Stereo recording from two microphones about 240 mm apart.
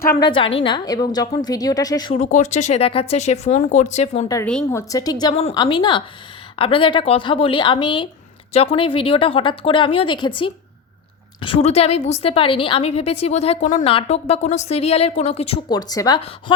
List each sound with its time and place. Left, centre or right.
0.2 s a woman's voice: left
2.1 s a woman's voice: left
4.3 s a woman's voice: centre
5.2 s a woman's voice: left